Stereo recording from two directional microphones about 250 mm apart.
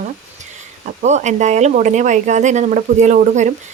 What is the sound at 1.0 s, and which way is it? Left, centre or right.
A woman's voice, right.